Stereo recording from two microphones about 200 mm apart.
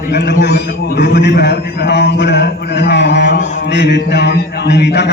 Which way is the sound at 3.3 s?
40° left (ahead or behind).